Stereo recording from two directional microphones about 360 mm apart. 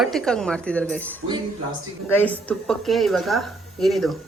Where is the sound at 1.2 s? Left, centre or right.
Right.